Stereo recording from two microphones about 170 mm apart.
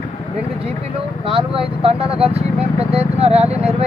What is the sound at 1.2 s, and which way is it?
Speech, 30° right (ahead or behind).